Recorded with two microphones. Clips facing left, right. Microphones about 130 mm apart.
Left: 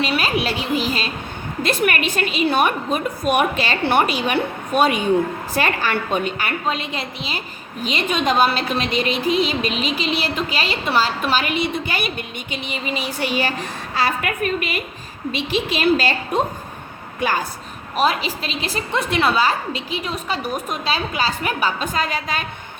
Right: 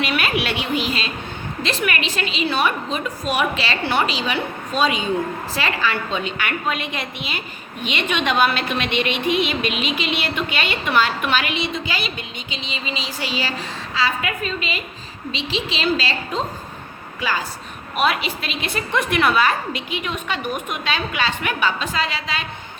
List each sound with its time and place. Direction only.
0.0 s a sound: 30° left (ahead or behind)
1.8 s a woman's voice: 45° left (ahead or behind)
6.4 s a woman's voice: 30° left (ahead or behind); by 17.4 s 55° left (ahead or behind)
17.9 s a woman's voice: 35° left (ahead or behind)